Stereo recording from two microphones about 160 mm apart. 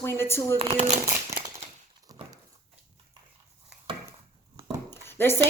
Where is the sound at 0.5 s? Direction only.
35° right (ahead or behind).